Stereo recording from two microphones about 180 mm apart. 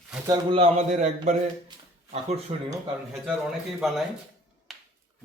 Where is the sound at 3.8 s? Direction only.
Centre (ahead or behind).